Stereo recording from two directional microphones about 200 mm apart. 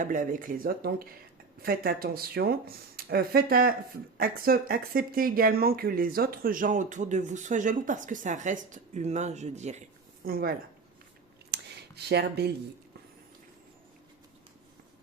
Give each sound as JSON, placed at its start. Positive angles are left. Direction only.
{"t": 0.0, "sound": "speech", "side_deg": -40}
{"t": 10.2, "sound": "speech", "side_deg": -45}
{"t": 11.5, "sound": "a sound", "side_deg": -55}